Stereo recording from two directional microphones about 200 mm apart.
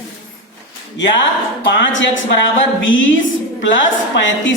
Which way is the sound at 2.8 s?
70° left (ahead or behind).